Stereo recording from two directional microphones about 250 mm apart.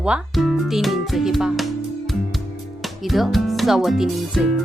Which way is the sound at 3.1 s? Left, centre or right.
Centre.